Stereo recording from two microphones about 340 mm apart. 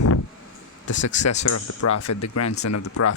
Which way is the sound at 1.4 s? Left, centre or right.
Left.